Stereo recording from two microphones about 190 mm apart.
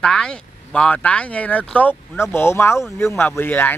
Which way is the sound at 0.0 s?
5° left (ahead or behind).